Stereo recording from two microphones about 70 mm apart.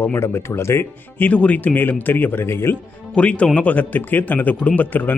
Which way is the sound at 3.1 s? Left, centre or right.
Centre.